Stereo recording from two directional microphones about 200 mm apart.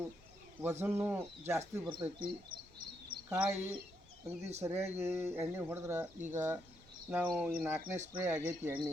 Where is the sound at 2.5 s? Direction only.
45° right (ahead or behind).